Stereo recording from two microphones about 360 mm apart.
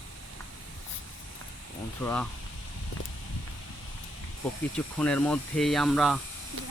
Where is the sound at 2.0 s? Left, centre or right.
Centre.